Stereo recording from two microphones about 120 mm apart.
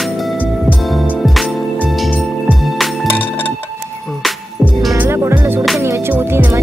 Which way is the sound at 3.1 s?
15° left (ahead or behind).